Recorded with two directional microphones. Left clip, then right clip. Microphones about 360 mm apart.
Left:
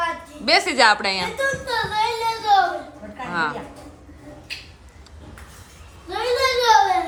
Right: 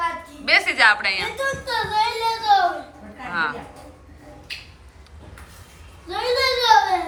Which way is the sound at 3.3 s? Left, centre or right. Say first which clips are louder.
Even; centre.